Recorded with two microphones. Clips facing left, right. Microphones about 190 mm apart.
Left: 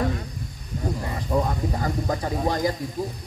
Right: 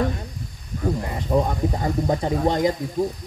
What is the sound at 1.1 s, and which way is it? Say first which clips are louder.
A woman's voice: right 1 dB; 20° right (ahead or behind).